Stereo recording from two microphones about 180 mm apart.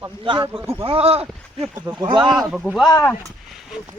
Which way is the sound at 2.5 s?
5° right (ahead or behind).